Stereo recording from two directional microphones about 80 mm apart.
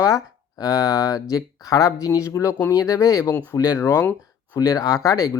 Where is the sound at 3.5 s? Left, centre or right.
Left.